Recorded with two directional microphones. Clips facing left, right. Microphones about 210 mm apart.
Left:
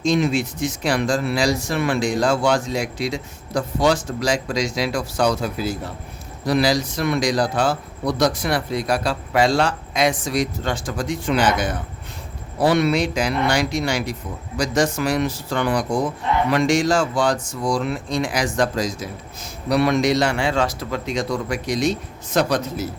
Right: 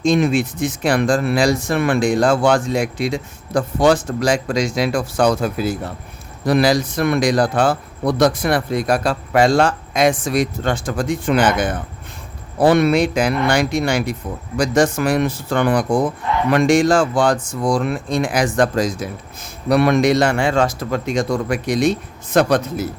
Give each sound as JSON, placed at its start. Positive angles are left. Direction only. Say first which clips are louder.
{"t": 0.0, "sound": "speech", "louder": "right 3 dB", "side_deg": -55}